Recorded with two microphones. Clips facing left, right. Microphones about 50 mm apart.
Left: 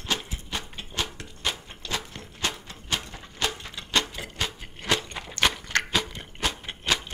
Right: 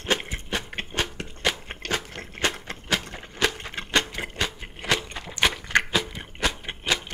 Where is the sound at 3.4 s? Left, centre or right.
Right.